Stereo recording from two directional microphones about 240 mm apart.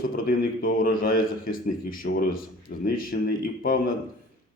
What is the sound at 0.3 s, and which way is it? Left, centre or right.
A man's voice, left.